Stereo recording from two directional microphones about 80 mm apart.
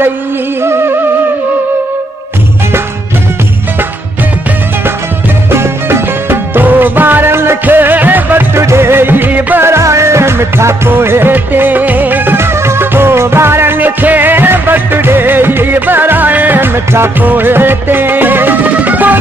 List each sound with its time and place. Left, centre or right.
0.6 s music: right
5.5 s music: right
9.7 s music: right